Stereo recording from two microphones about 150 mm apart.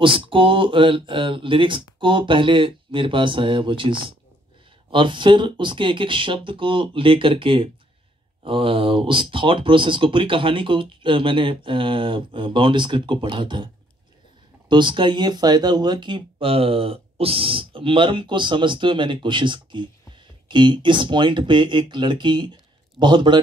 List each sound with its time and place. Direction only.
0.0 s speech: 35° right (ahead or behind)
14.7 s speech: 30° right (ahead or behind)